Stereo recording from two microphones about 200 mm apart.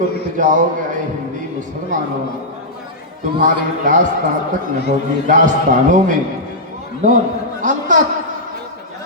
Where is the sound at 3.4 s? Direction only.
40° right (ahead or behind).